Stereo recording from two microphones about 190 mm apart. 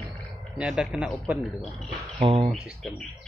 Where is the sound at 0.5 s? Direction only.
5° right (ahead or behind).